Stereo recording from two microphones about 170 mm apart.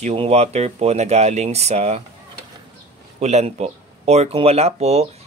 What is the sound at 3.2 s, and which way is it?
Speech, 40° right (ahead or behind).